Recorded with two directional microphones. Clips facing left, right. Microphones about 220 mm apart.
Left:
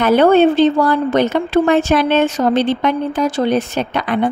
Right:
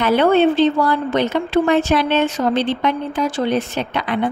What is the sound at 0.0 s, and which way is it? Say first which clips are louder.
Speech: left 3 dB; 45° left (ahead or behind).